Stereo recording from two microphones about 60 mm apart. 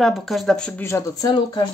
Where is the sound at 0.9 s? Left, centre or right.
Left.